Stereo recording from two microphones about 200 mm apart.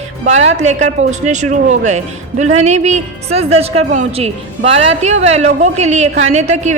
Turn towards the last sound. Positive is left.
turn(degrees=-35)  # may be behind; listen again after turning